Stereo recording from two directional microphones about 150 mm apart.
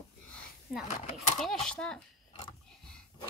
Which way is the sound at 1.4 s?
5° left (ahead or behind).